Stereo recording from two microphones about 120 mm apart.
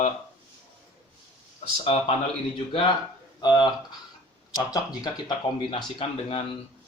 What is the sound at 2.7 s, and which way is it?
Speech, 45° left (ahead or behind).